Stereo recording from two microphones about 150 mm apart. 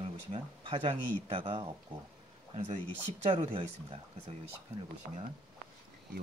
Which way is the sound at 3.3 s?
40° right (ahead or behind).